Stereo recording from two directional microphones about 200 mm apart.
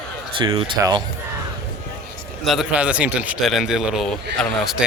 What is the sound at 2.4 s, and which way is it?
A man's voice, centre (ahead or behind).